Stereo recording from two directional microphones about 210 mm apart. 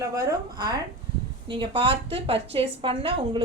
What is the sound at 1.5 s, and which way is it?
A woman's voice, 25° right (ahead or behind).